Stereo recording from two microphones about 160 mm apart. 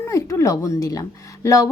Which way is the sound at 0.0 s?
20° left (ahead or behind).